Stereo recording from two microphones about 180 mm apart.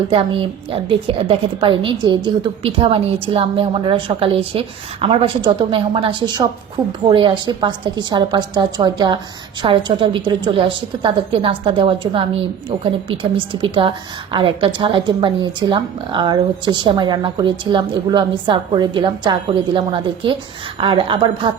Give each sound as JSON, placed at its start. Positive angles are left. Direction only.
{"t": 0.1, "sound": "a woman's voice", "side_deg": -30}